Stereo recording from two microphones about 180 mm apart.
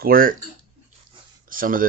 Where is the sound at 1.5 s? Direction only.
50° right (ahead or behind).